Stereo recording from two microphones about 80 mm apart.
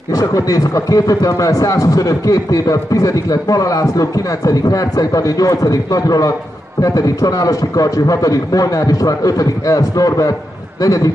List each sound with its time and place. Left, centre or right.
0.1 s speech: left